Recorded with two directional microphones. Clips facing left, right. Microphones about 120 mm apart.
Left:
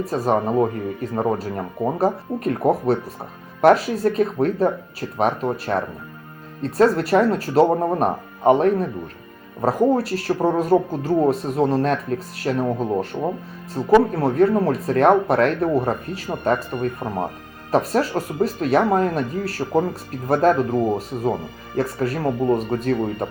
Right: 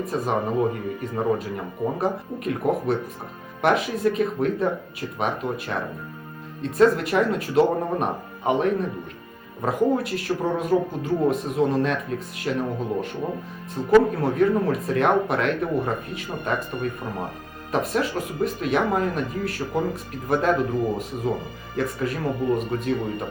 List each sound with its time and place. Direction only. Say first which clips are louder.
0.0 s speech: left 4 dB; 35° left (ahead or behind)